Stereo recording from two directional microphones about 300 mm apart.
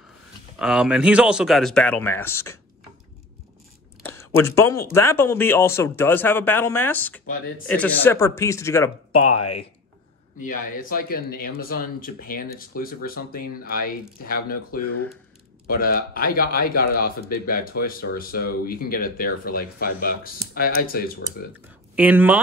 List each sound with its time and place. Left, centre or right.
0.6 s speech: centre
4.0 s a sound: centre
4.9 s speech: centre
9.1 s speech: left
10.4 s speech: left
21.9 s speech: centre